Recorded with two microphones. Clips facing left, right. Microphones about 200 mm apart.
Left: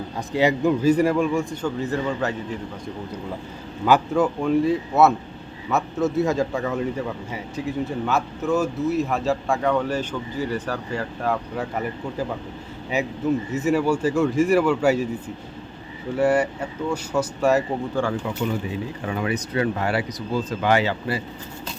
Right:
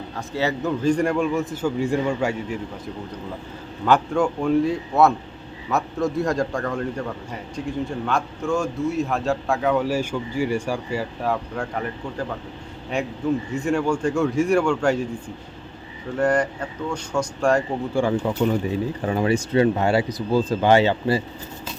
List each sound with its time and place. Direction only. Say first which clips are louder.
0.2 s a man's voice: left 4 dB; 15° left (ahead or behind); by 2.3 s 10° right (ahead or behind)
3.8 s a man's voice: left 1 dB; 5° left (ahead or behind)
16.1 s speech: left 1 dB; 10° left (ahead or behind)
18.0 s speech: right 3 dB; 15° right (ahead or behind)
19.0 s speech: right 4 dB; 30° right (ahead or behind)